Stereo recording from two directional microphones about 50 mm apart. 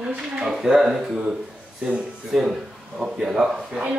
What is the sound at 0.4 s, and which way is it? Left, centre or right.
Speech, centre.